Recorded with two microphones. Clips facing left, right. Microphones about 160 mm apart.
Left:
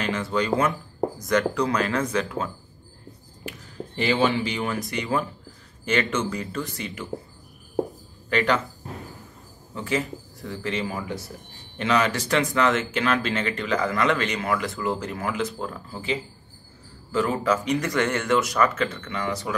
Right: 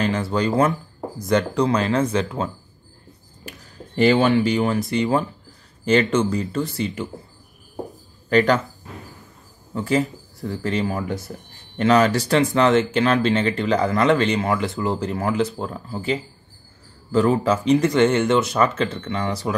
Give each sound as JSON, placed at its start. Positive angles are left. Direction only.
{"t": 0.0, "sound": "speech", "side_deg": -35}
{"t": 3.4, "sound": "speech", "side_deg": -45}
{"t": 8.3, "sound": "speech", "side_deg": -40}
{"t": 9.8, "sound": "speech", "side_deg": -40}